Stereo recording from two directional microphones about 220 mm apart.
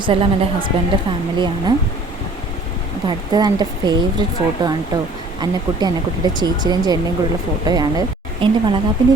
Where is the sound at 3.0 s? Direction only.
20° right (ahead or behind).